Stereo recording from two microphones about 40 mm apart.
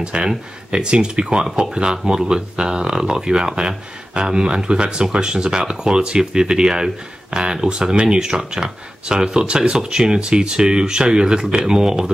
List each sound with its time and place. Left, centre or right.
0.0 s speech: right